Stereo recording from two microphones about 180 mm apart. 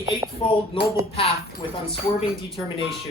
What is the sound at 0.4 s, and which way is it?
Speech, 30° left (ahead or behind).